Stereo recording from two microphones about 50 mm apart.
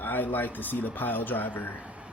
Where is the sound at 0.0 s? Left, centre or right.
Left.